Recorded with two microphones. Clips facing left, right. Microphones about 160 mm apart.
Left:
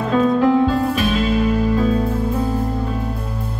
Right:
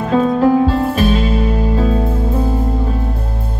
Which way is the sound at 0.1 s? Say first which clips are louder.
Right 3 dB; 35° right (ahead or behind).